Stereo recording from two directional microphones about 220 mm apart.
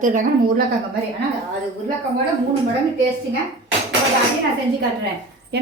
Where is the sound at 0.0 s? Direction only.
35° right (ahead or behind).